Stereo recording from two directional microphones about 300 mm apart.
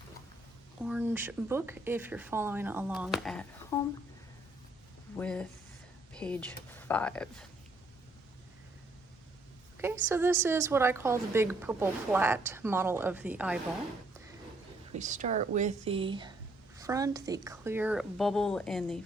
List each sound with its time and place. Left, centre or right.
0.8 s a woman's voice: centre
5.1 s speech: centre
9.8 s a woman's voice: centre
14.9 s a woman's voice: right; by 18.9 s centre